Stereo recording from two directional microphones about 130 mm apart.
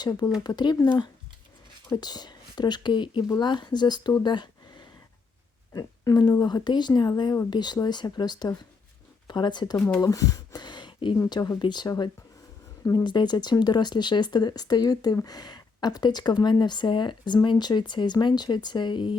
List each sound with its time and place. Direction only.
0.0 s speech: 30° left (ahead or behind)
1.9 s speech: 30° left (ahead or behind)